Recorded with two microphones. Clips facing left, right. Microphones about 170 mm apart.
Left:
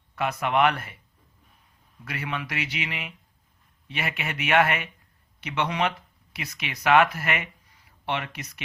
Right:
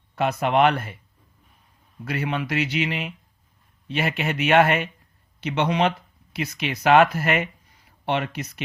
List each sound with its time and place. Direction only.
0.2 s speech: 30° right (ahead or behind)
2.0 s speech: 25° right (ahead or behind)